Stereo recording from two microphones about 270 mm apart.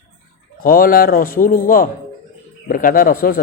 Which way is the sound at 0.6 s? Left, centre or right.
Left.